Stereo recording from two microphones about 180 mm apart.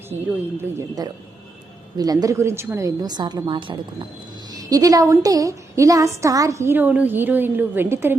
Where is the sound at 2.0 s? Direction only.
20° right (ahead or behind).